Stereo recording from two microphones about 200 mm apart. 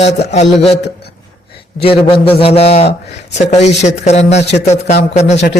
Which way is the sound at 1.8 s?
25° left (ahead or behind).